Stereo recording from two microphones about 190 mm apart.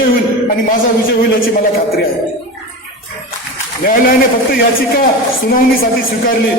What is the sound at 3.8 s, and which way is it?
Speech, 50° left (ahead or behind).